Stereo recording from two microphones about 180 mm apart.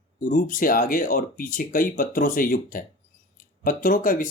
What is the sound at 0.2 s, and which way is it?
Speech, 50° left (ahead or behind).